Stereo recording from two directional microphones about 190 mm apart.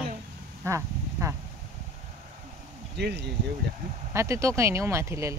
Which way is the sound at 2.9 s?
60° right (ahead or behind).